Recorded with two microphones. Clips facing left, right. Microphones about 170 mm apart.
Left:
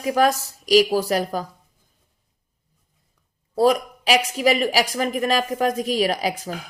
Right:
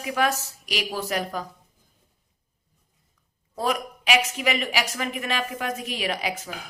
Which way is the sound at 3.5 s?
35° left (ahead or behind).